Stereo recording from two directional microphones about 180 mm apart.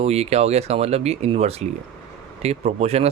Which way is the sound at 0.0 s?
35° right (ahead or behind).